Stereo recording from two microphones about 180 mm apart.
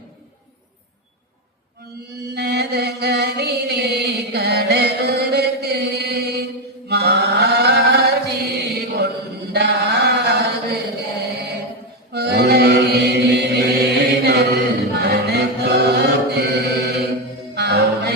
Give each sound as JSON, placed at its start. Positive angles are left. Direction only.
{"t": 2.3, "sound": "chant", "side_deg": -65}
{"t": 12.1, "sound": "chant", "side_deg": -65}
{"t": 17.5, "sound": "music", "side_deg": -65}